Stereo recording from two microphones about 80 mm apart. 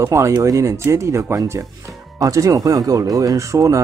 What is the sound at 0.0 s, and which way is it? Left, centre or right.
Speech, right.